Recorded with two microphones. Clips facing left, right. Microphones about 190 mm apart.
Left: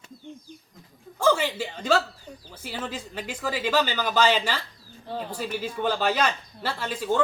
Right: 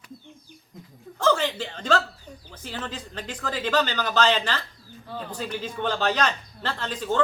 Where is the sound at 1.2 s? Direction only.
10° left (ahead or behind).